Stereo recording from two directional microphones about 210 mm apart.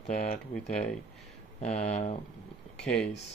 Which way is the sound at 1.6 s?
30° left (ahead or behind).